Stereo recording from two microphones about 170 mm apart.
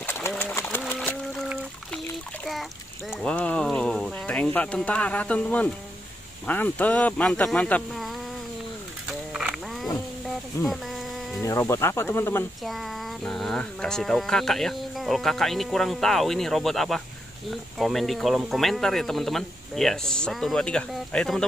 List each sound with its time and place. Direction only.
0.0 s pigeon: 15° left (ahead or behind)
0.9 s a sound: centre (ahead or behind)
3.1 s speech: centre (ahead or behind)
9.3 s wild animals: centre (ahead or behind)
10.2 s a sound: centre (ahead or behind)
11.4 s speech: 15° left (ahead or behind)
12.6 s speech: centre (ahead or behind)